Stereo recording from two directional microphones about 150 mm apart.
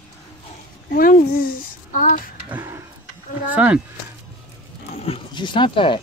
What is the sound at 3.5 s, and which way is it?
Speech, 10° right (ahead or behind).